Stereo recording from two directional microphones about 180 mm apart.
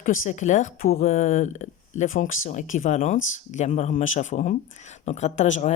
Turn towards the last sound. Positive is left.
turn(degrees=40)  # may be behind; listen again after turning